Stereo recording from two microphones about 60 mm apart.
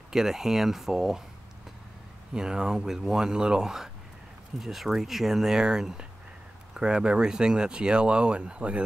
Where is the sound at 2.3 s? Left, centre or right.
Centre.